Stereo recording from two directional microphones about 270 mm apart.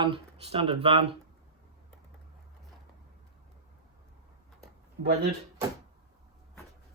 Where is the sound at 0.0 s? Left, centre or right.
Centre.